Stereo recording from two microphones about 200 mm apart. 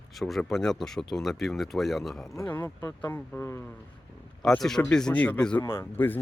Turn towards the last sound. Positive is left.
turn(degrees=10)  # may be behind; listen again after turning